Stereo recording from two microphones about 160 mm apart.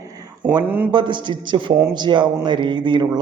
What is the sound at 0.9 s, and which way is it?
A man's voice, 30° right (ahead or behind).